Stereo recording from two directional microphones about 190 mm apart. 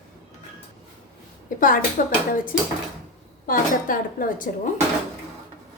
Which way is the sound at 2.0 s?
45° left (ahead or behind).